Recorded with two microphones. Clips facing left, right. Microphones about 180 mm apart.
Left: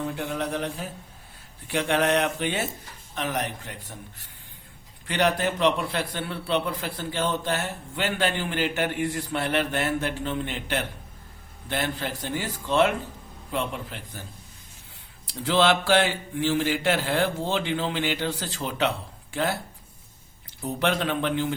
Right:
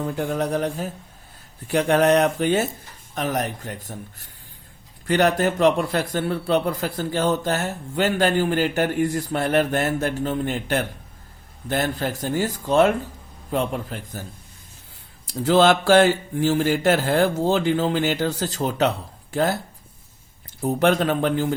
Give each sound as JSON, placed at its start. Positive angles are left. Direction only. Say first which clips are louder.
{"t": 0.0, "sound": "a man's voice", "louder": "right 5 dB", "side_deg": -45}
{"t": 15.3, "sound": "a man's voice", "louder": "right 5 dB", "side_deg": -45}
{"t": 20.6, "sound": "a man's voice", "louder": "right 6 dB", "side_deg": -45}